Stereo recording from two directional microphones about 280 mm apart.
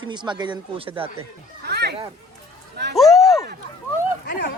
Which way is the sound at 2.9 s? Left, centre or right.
Centre.